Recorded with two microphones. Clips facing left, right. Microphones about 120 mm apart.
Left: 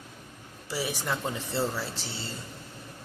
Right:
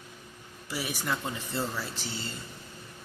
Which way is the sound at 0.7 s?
30° left (ahead or behind).